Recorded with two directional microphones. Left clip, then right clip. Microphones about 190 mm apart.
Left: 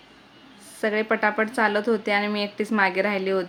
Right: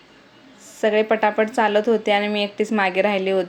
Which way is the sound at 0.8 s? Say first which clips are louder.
Right 5 dB; 5° right (ahead or behind).